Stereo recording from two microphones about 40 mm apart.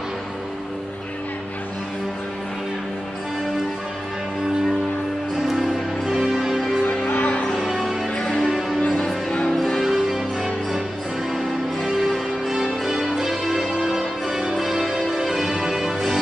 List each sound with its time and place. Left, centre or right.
5.5 s music: centre
6.9 s music: left
7.5 s music: centre
8.1 s music: centre
8.5 s music: centre
8.8 s music: left
9.8 s music: centre